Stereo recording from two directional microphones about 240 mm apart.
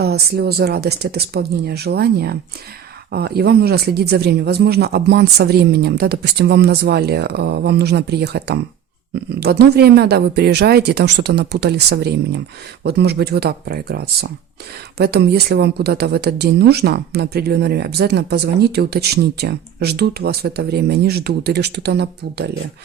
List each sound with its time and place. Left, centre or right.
0.0 s speech: right